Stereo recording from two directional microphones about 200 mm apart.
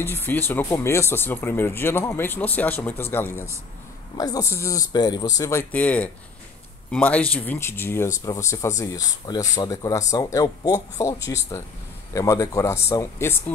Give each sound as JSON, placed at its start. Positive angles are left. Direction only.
{"t": 0.2, "sound": "speech", "side_deg": 10}